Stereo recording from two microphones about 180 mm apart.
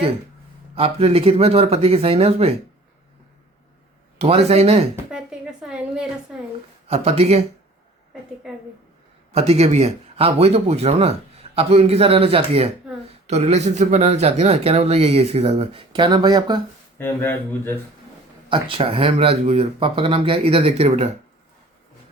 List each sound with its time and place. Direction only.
0.8 s a man's voice: 35° right (ahead or behind)
4.2 s a man's voice: 35° right (ahead or behind)
5.1 s a sound: 5° right (ahead or behind)
6.8 s a man's voice: 35° right (ahead or behind)
8.4 s a woman's voice: 5° right (ahead or behind)
9.3 s a man's voice: 35° right (ahead or behind)
17.0 s speech: 10° left (ahead or behind)
18.4 s a man's voice: 30° right (ahead or behind)